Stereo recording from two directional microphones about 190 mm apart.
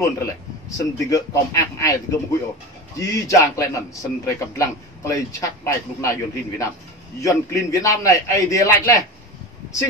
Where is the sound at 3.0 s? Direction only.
15° left (ahead or behind).